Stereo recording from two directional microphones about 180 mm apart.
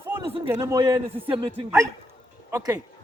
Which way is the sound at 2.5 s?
15° right (ahead or behind).